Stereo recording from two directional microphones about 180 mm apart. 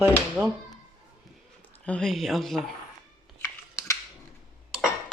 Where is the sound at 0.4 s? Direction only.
10° right (ahead or behind).